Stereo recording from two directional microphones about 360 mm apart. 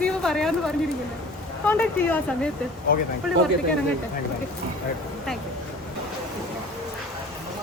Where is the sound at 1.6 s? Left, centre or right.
Centre.